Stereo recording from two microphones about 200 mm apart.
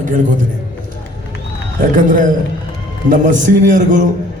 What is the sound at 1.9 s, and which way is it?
A man's voice, 40° right (ahead or behind).